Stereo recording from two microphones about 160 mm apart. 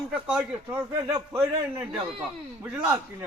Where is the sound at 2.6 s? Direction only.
10° right (ahead or behind).